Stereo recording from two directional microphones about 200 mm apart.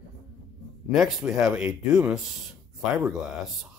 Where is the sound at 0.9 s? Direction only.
Centre (ahead or behind).